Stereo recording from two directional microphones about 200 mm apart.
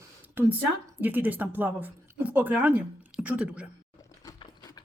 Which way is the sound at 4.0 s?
15° left (ahead or behind).